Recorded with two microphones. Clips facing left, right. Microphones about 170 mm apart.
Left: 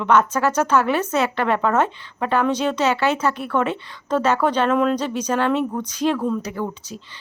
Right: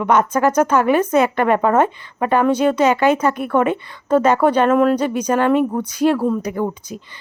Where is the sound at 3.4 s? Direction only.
50° right (ahead or behind).